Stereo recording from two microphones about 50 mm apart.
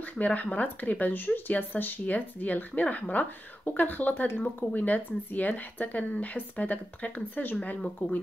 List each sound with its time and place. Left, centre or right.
0.0 s speech: left